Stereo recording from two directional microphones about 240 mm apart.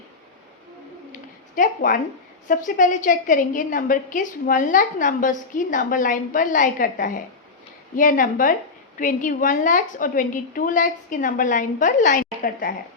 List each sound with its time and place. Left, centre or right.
1.5 s a woman's voice: left